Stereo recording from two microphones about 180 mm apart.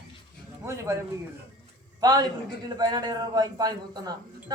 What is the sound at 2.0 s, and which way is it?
Speech, 20° right (ahead or behind).